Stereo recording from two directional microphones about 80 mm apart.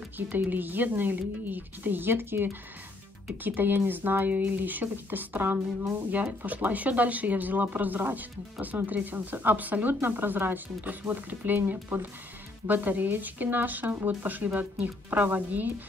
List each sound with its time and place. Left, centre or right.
0.3 s speech: right